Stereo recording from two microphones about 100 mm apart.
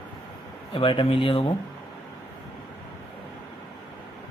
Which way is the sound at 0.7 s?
60° left (ahead or behind).